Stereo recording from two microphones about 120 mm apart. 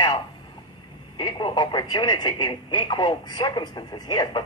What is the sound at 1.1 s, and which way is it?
Speech, 40° left (ahead or behind).